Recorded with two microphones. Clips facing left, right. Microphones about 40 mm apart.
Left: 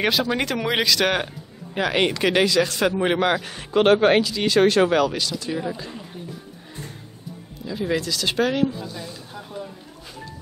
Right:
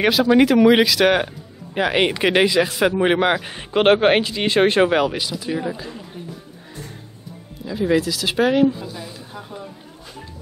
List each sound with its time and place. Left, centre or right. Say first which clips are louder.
0.0 s a man's voice: right 7 dB; centre
7.6 s speech: right 5 dB; centre